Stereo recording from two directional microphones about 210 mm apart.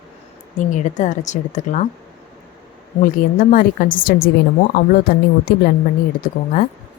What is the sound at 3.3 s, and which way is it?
Speech, 40° left (ahead or behind).